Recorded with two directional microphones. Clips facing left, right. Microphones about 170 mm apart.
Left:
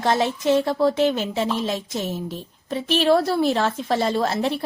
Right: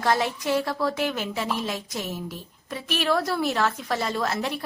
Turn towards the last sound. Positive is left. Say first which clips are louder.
# left 5 dB
turn(degrees=30)  # may be behind; listen again after turning